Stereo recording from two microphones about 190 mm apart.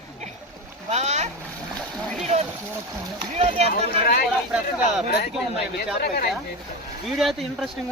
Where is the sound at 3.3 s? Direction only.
35° right (ahead or behind).